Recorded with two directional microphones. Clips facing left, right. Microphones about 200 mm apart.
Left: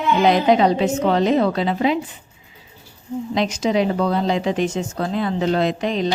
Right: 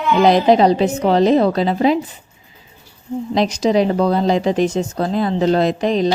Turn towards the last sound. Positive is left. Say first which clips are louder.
# right 4 dB
turn(degrees=-40)  # may be behind; listen again after turning